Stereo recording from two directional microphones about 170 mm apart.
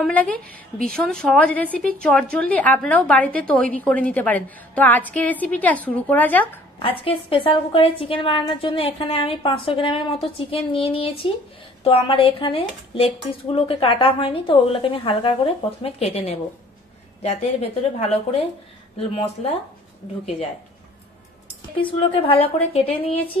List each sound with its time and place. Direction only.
0.0 s a woman's voice: 10° left (ahead or behind)
7.0 s speech: 35° left (ahead or behind)
21.8 s speech: 30° left (ahead or behind)